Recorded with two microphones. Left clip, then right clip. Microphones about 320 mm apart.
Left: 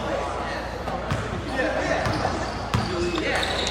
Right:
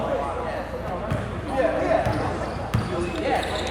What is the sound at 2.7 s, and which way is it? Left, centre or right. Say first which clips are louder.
Basketball bounce: left 3 dB; centre.